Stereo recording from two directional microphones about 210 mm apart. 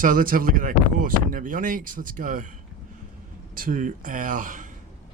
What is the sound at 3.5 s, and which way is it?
Speech, 40° right (ahead or behind).